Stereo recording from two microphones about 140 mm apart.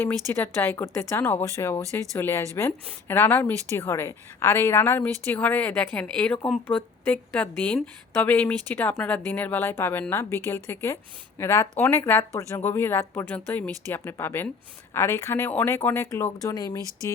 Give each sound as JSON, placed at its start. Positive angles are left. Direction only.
{"t": 0.0, "sound": "a woman's voice", "side_deg": 15}